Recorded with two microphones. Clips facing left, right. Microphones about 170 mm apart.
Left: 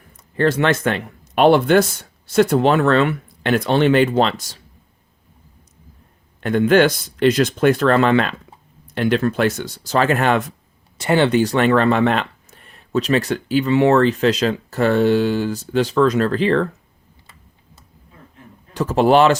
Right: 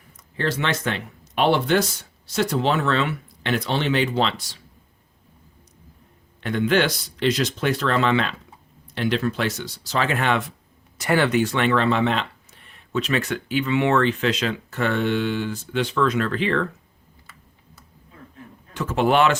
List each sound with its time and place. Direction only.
0.3 s speech: 50° left (ahead or behind)
6.4 s speech: 50° left (ahead or behind)
10.9 s speech: 25° left (ahead or behind)
18.7 s speech: 35° left (ahead or behind)